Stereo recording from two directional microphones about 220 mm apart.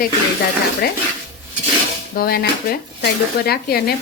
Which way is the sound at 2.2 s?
45° left (ahead or behind).